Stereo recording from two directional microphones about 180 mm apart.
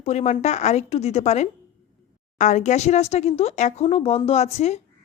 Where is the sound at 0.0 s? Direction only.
40° left (ahead or behind).